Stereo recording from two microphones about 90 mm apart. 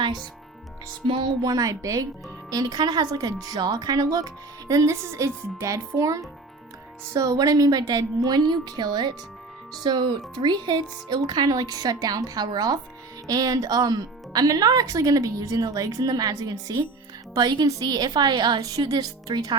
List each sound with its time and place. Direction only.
1.0 s music: 70° right (ahead or behind)
1.4 s speech: 40° right (ahead or behind)